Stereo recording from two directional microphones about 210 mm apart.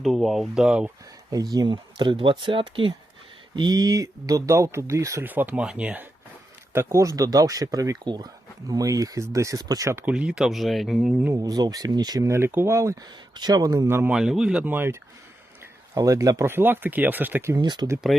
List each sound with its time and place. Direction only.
0.0 s speech: centre (ahead or behind)
1.3 s speech: 20° right (ahead or behind)
16.0 s speech: 15° right (ahead or behind)